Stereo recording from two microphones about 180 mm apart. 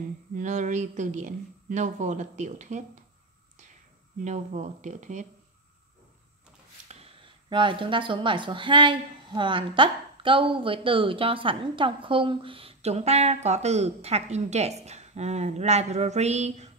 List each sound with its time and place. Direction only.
0.4 s speech: 40° right (ahead or behind)
4.2 s speech: 40° right (ahead or behind)
6.9 s speech: 30° right (ahead or behind)